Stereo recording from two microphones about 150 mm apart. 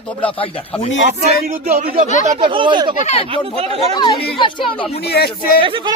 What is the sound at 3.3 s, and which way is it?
Speech, 40° right (ahead or behind).